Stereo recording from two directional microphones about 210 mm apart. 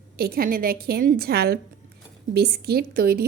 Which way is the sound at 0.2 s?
45° right (ahead or behind).